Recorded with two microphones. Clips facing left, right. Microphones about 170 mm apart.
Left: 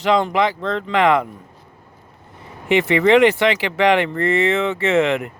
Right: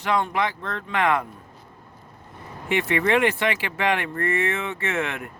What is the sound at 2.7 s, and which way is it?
Speech, 90° left.